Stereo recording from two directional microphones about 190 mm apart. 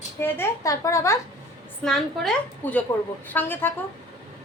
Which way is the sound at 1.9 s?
Centre (ahead or behind).